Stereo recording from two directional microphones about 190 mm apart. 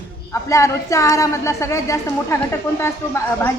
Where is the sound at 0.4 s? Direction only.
15° left (ahead or behind).